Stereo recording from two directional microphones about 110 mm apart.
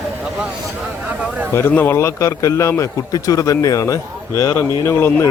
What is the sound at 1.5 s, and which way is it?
A man's voice, 20° left (ahead or behind).